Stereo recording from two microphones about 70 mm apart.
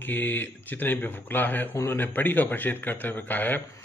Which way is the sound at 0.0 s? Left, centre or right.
Left.